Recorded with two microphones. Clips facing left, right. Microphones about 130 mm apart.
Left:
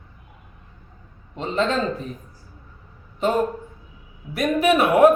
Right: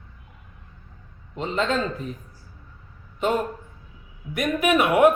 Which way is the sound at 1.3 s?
35° left (ahead or behind).